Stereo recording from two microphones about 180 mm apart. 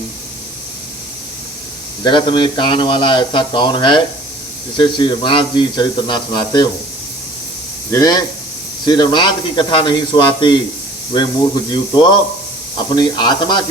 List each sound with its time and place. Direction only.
2.0 s speech: 25° left (ahead or behind)
7.9 s speech: 20° left (ahead or behind)